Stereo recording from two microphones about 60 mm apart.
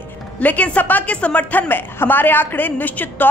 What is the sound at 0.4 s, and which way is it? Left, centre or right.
A woman's voice, left.